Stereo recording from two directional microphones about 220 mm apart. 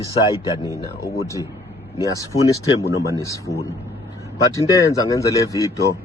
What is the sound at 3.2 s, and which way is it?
Speech, 15° left (ahead or behind).